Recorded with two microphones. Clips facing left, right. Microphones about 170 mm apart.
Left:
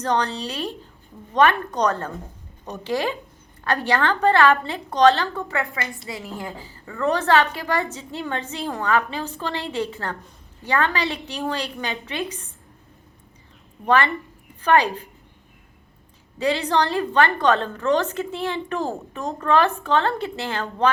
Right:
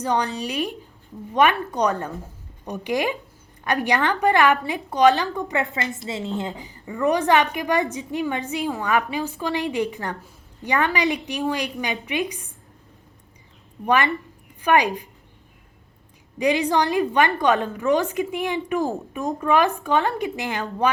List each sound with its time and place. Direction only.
0.0 s a woman's voice: 10° right (ahead or behind)
13.8 s a woman's voice: 15° right (ahead or behind)
16.4 s a woman's voice: 15° right (ahead or behind)